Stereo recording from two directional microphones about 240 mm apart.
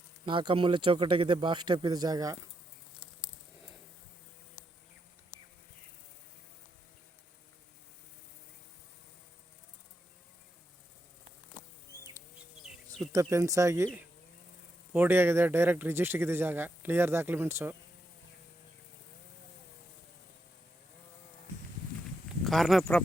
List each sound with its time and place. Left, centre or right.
0.3 s speech: right
13.1 s speech: centre
22.4 s speech: centre